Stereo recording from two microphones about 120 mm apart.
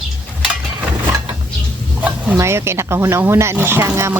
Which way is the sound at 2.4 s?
20° right (ahead or behind).